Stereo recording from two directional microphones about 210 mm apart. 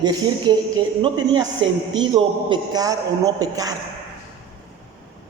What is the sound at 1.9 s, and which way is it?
A man's voice, 20° right (ahead or behind).